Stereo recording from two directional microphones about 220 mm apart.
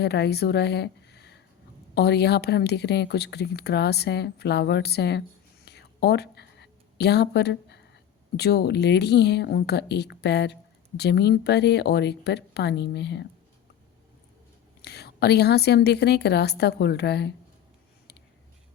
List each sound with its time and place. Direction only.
0.0 s speech: 50° left (ahead or behind)
5.6 s a sound: 50° left (ahead or behind)
8.4 s speech: 50° left (ahead or behind)
14.8 s speech: 50° left (ahead or behind)